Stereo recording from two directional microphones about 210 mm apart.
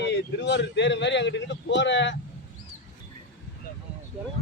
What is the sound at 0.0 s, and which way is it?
A man's voice, 55° left (ahead or behind).